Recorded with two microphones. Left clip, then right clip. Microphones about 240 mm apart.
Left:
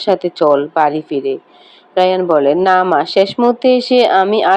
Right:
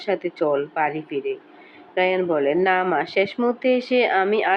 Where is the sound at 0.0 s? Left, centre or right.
Left.